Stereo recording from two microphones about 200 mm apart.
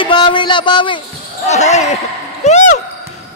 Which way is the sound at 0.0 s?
25° left (ahead or behind).